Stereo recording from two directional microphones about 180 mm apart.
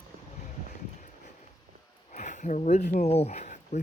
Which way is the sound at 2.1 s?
45° left (ahead or behind).